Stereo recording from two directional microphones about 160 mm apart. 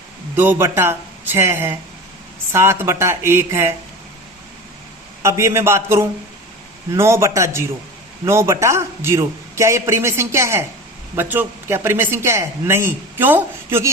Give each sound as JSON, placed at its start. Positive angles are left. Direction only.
{"t": 0.3, "sound": "a man's voice", "side_deg": -15}
{"t": 5.2, "sound": "a man's voice", "side_deg": -15}